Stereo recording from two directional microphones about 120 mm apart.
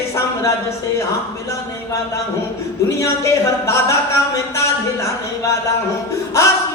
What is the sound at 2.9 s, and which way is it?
Speech, 25° left (ahead or behind).